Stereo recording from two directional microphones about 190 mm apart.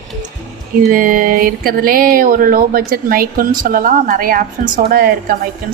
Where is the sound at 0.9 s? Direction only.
45° right (ahead or behind).